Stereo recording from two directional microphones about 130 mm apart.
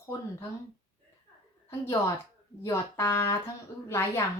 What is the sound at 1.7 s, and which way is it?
A woman's voice, 20° left (ahead or behind).